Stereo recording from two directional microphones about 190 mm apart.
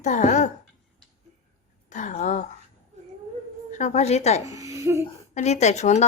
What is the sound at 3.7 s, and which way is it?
Speech, 40° left (ahead or behind).